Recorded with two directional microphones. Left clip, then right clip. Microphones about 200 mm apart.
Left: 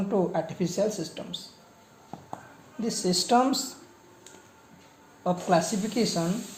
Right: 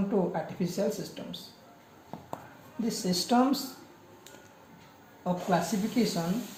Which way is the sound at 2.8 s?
55° left (ahead or behind).